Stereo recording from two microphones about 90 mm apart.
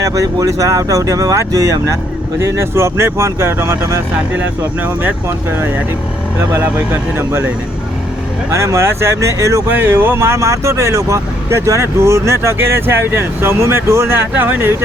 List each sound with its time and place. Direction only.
0.0 s speech: 40° right (ahead or behind)
4.3 s speech: 20° right (ahead or behind)
7.2 s speech: 30° right (ahead or behind)